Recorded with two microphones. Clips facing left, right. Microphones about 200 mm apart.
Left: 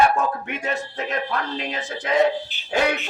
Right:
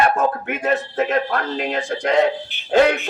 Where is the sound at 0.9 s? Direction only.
55° right (ahead or behind).